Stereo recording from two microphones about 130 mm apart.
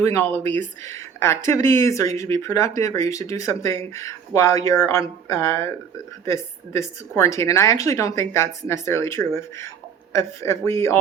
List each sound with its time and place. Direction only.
0.0 s a woman's voice: 20° left (ahead or behind)